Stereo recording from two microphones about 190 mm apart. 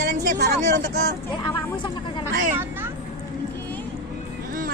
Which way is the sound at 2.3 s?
45° right (ahead or behind).